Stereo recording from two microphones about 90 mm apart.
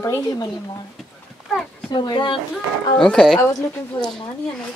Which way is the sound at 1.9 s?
60° left (ahead or behind).